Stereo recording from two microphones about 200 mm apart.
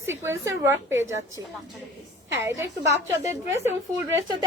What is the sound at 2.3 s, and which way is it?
A woman's voice, 10° right (ahead or behind).